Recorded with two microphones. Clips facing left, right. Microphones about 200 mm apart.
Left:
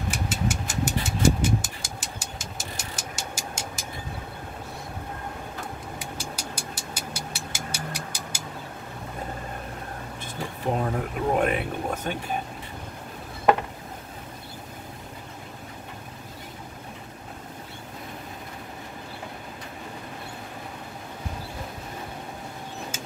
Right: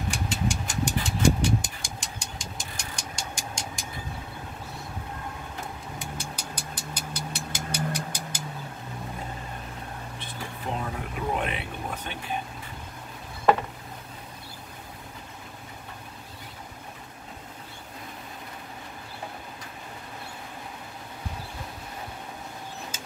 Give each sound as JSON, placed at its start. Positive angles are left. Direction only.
{"t": 0.1, "sound": "vehicle", "side_deg": 5}
{"t": 6.3, "sound": "vehicle", "side_deg": 10}
{"t": 10.2, "sound": "a sound", "side_deg": 45}